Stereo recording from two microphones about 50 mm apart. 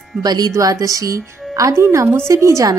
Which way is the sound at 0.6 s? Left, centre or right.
Right.